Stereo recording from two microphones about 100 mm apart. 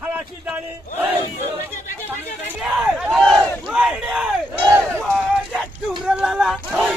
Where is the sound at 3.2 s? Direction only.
5° left (ahead or behind).